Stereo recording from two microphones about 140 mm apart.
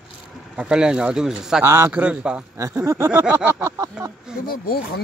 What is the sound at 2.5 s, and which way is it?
Speech, 20° right (ahead or behind).